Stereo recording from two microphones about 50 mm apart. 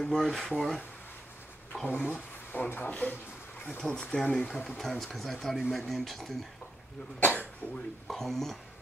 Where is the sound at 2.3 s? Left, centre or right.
Left.